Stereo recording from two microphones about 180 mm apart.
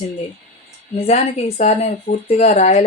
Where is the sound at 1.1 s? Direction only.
40° left (ahead or behind).